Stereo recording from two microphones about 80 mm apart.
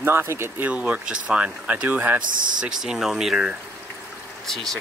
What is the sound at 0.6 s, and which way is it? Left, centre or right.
Speech, centre.